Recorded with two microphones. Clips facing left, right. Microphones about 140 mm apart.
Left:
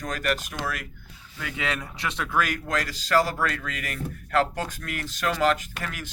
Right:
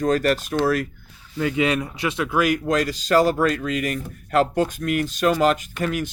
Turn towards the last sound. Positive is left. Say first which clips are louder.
# right 11 dB
turn(degrees=-20)  # may be behind; listen again after turning